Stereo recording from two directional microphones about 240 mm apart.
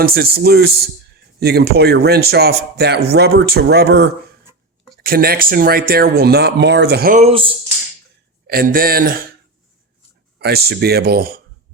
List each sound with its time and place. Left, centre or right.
0.0 s speech: right
8.4 s speech: right
10.3 s speech: right